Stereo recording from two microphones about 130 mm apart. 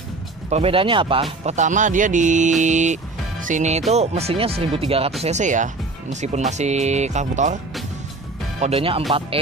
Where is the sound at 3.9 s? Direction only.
55° right (ahead or behind).